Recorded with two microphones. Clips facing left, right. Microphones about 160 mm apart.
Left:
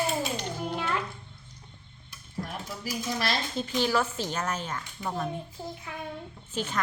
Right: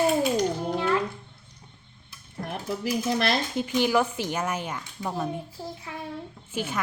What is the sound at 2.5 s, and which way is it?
Speech, 60° right (ahead or behind).